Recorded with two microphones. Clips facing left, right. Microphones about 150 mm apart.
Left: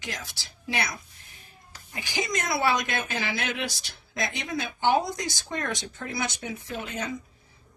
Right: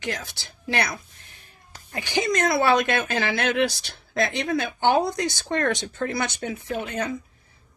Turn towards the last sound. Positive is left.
turn(degrees=-60)  # may be behind; listen again after turning